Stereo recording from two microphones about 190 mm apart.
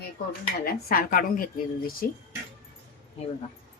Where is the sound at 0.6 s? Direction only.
50° left (ahead or behind).